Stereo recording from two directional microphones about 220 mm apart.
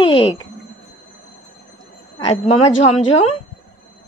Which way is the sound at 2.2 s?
30° left (ahead or behind).